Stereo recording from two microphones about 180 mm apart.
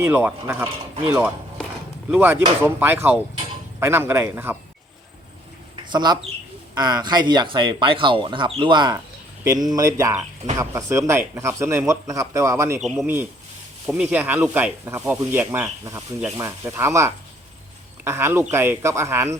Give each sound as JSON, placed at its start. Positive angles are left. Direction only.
{"t": 0.0, "sound": "speech", "side_deg": -10}
{"t": 2.0, "sound": "speech", "side_deg": -10}
{"t": 5.7, "sound": "bird", "side_deg": -25}
{"t": 6.7, "sound": "speech", "side_deg": -20}
{"t": 13.8, "sound": "speech", "side_deg": -10}